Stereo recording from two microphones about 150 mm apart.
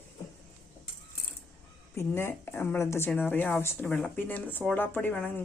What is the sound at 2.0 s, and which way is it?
Speech, 15° left (ahead or behind).